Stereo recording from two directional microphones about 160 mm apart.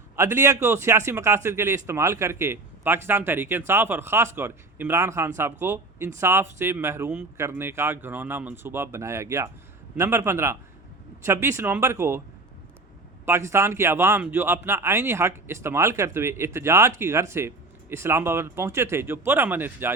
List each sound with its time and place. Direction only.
0.2 s a man's voice: 15° right (ahead or behind)
13.2 s a man's voice: 15° right (ahead or behind)